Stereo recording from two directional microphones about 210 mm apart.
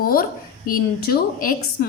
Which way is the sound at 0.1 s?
45° left (ahead or behind).